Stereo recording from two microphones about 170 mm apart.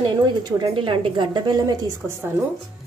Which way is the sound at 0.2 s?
25° right (ahead or behind).